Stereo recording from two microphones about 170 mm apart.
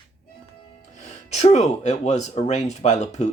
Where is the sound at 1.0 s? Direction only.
40° left (ahead or behind).